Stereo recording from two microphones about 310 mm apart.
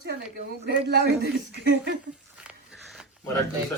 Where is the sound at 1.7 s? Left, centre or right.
Right.